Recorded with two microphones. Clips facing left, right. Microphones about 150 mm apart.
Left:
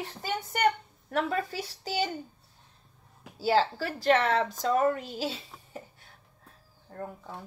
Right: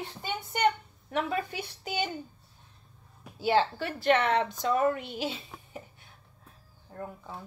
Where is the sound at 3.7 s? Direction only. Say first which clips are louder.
Left 1 dB; 40° left (ahead or behind).